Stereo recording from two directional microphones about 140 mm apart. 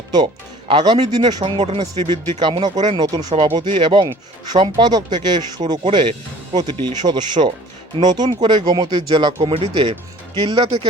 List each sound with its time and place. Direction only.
0.7 s speech: 30° right (ahead or behind)
3.3 s speech: 45° right (ahead or behind)
3.6 s speech: 35° right (ahead or behind)